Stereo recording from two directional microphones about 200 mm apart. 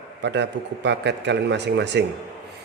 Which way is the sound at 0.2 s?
60° right (ahead or behind).